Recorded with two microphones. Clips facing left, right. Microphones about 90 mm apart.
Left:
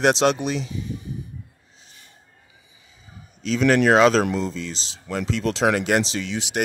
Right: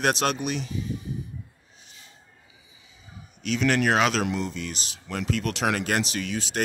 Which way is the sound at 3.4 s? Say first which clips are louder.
Left 5 dB; 30° left (ahead or behind).